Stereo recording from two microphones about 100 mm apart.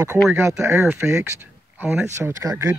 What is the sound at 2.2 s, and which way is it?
Speech, 30° right (ahead or behind).